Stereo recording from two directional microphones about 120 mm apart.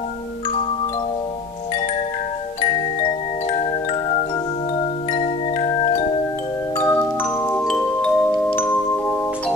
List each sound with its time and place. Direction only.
5.1 s music: 60° left (ahead or behind)
6.8 s mallet percussion: 20° left (ahead or behind)
7.6 s music: 5° left (ahead or behind)
8.5 s chime: 15° left (ahead or behind)